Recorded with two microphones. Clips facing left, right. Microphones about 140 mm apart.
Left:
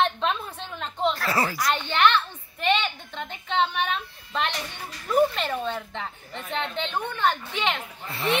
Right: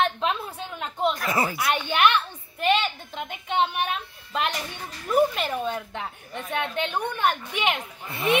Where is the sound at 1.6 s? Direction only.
10° right (ahead or behind).